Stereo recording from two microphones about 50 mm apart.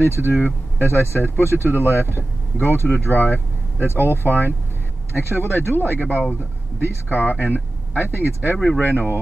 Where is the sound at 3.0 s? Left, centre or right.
Left.